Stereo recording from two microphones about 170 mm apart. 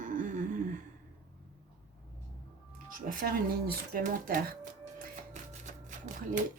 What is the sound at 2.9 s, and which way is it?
Speech, 55° right (ahead or behind).